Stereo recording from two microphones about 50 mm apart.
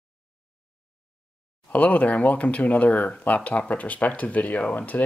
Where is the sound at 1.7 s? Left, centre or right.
Left.